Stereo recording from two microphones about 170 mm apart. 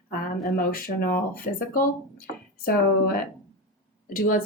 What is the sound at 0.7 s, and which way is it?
Speech, 55° left (ahead or behind).